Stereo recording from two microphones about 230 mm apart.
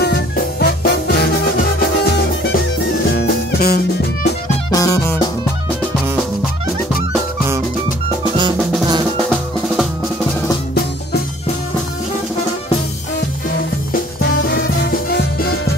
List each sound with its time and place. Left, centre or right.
0.0 s music: left
3.1 s music: left
4.6 s music: centre
13.9 s music: left